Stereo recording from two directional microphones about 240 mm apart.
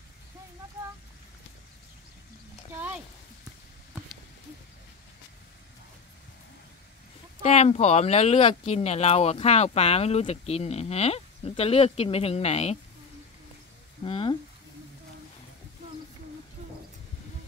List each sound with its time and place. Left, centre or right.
7.4 s speech: left
14.0 s speech: left